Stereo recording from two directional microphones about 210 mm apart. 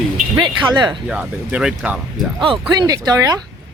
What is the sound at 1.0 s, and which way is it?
Speech, 5° right (ahead or behind).